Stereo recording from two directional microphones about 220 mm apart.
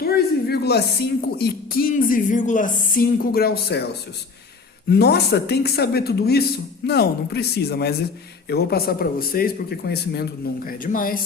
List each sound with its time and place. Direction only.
0.0 s speech: 45° left (ahead or behind)